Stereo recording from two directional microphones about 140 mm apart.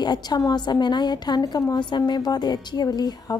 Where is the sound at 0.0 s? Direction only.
30° left (ahead or behind).